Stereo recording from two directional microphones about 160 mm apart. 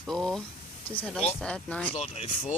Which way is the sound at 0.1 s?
Centre (ahead or behind).